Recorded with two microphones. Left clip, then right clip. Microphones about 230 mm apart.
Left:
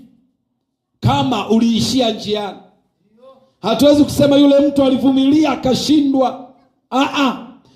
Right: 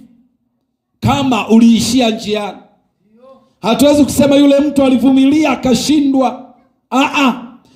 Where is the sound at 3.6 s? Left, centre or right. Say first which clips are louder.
Right 2 dB; right.